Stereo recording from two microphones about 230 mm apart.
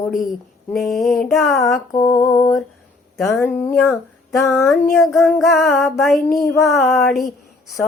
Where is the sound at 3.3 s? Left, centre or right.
Centre.